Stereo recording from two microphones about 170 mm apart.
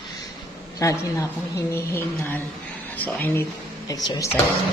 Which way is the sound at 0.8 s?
20° left (ahead or behind).